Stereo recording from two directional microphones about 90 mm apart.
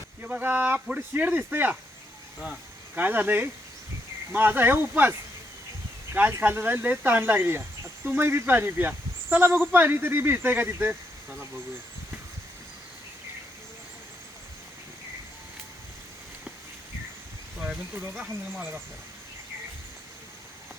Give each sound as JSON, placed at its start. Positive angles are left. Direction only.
{"t": 0.2, "sound": "speech", "side_deg": -20}
{"t": 6.4, "sound": "speech", "side_deg": -20}